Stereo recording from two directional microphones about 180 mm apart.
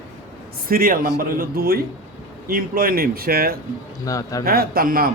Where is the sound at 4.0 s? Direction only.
20° left (ahead or behind).